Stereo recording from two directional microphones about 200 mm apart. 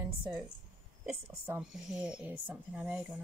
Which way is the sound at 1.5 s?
5° right (ahead or behind).